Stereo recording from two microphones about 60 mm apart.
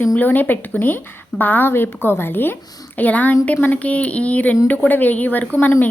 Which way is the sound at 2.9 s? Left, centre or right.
Left.